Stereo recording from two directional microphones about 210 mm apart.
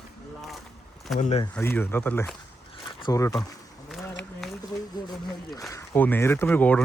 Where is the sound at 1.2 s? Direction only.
30° left (ahead or behind).